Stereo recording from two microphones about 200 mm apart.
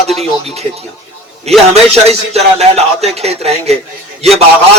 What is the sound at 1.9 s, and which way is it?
Speech, 30° right (ahead or behind).